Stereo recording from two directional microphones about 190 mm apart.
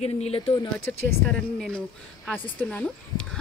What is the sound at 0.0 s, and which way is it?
Speech, 30° left (ahead or behind).